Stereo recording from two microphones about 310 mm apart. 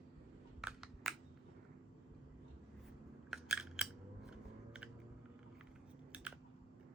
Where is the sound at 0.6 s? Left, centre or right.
Centre.